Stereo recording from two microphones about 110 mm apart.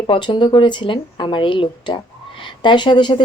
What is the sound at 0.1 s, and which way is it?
Speech, 45° left (ahead or behind).